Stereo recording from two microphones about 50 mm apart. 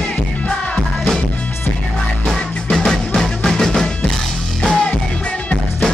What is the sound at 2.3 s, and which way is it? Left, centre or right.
Music, centre.